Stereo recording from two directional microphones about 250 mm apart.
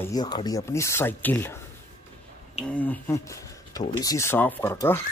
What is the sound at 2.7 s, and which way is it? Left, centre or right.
Speech, centre.